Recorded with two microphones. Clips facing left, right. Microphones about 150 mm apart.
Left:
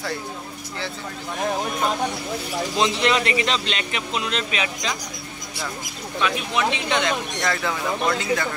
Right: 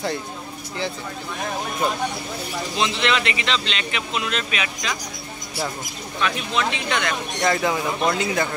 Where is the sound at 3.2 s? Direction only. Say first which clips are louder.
Left 2 dB; 40° left (ahead or behind).